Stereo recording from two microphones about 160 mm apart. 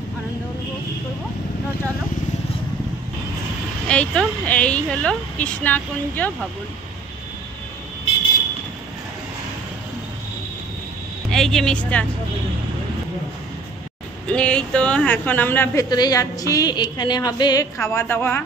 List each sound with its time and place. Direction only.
3.8 s a man's voice: 5° left (ahead or behind)
11.3 s speech: 5° left (ahead or behind)
14.3 s a man's voice: 5° left (ahead or behind)